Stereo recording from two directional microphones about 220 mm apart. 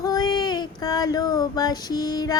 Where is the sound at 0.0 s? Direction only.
15° left (ahead or behind).